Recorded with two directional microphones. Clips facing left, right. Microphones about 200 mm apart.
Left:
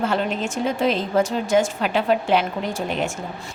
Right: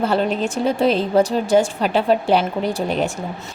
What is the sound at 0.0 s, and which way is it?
A woman's voice, 35° right (ahead or behind).